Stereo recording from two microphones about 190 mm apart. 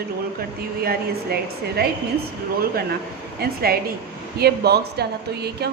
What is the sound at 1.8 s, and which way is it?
Speech, 55° right (ahead or behind).